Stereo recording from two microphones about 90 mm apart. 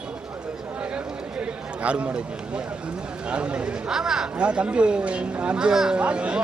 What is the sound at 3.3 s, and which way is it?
A man's voice, 10° right (ahead or behind).